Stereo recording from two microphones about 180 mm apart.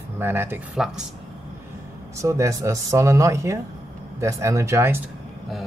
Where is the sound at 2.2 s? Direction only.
15° right (ahead or behind).